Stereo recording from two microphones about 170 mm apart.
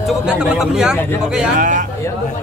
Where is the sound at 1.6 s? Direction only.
50° right (ahead or behind).